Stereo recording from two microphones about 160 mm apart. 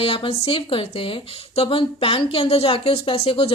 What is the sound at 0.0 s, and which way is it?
Speech, 35° left (ahead or behind).